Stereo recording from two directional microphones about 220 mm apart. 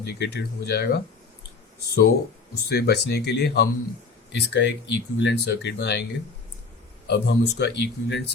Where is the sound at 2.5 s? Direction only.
45° left (ahead or behind).